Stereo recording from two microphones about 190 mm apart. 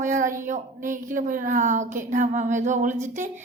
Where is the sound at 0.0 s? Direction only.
45° right (ahead or behind).